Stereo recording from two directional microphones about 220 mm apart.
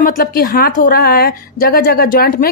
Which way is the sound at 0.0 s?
40° left (ahead or behind).